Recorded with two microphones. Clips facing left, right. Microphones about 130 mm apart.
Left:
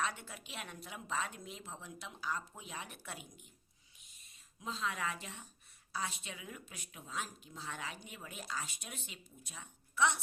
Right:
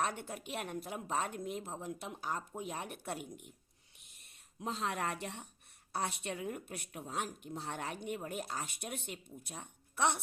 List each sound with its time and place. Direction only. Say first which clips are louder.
0.0 s a woman's voice: right 3 dB; 50° right (ahead or behind)
4.0 s a sound: right 2 dB; 65° right (ahead or behind)
5.9 s speech: right 4 dB; 60° right (ahead or behind)